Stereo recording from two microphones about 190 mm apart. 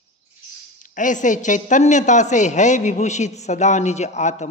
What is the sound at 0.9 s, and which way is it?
A man's voice, 40° left (ahead or behind).